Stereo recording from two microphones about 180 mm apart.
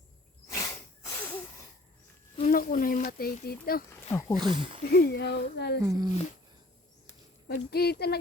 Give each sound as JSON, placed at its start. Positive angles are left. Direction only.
{"t": 0.4, "sound": "a sound", "side_deg": 15}
{"t": 2.4, "sound": "a sound", "side_deg": 50}
{"t": 4.4, "sound": "speech", "side_deg": -25}
{"t": 4.9, "sound": "speech", "side_deg": 60}
{"t": 5.8, "sound": "speech", "side_deg": -20}
{"t": 7.4, "sound": "speech", "side_deg": 60}